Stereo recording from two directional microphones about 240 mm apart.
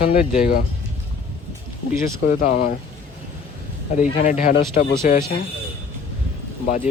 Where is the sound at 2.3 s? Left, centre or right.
Left.